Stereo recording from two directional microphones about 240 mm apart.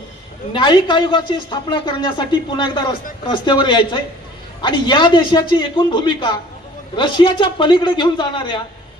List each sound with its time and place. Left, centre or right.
0.5 s speech: centre